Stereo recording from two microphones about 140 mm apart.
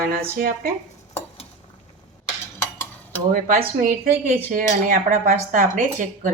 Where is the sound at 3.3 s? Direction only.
80° right.